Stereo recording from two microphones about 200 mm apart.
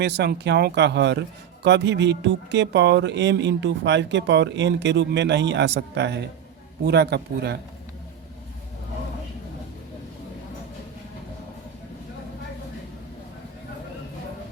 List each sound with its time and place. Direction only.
0.0 s speech: 60° right (ahead or behind)